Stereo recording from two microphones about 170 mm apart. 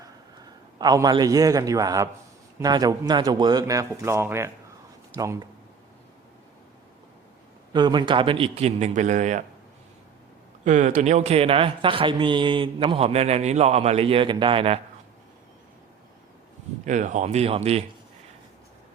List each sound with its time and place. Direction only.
0.8 s a man's voice: 25° right (ahead or behind)
7.7 s a man's voice: 25° right (ahead or behind); by 9.4 s 45° right (ahead or behind)
10.6 s a man's voice: 45° right (ahead or behind)
16.8 s a man's voice: 45° right (ahead or behind)